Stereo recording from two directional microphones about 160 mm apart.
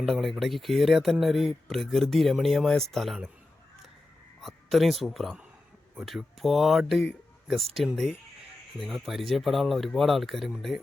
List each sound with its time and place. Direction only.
0.0 s speech: centre (ahead or behind)
4.4 s speech: centre (ahead or behind)